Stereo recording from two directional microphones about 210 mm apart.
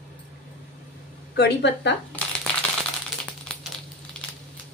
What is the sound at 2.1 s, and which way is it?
Shuffling cards, 5° left (ahead or behind).